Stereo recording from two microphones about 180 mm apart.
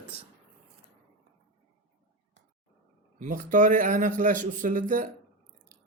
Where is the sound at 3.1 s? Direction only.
45° right (ahead or behind).